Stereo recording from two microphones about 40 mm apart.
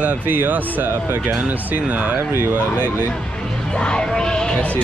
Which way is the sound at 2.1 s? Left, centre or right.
Right.